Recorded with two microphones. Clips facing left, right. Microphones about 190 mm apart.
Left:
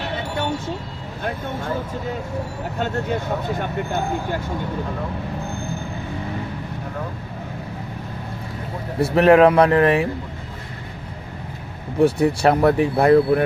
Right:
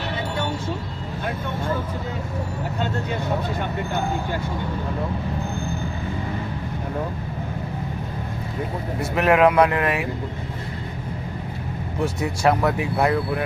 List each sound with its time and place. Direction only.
9.0 s speech: 35° left (ahead or behind)
12.0 s speech: 35° left (ahead or behind)